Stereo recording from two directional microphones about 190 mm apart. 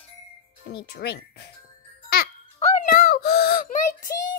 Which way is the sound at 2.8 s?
50° left (ahead or behind).